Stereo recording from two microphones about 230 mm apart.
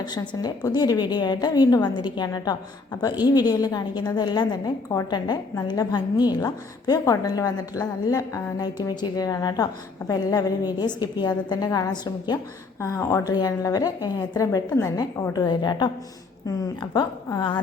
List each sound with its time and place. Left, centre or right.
0.0 s a woman's voice: centre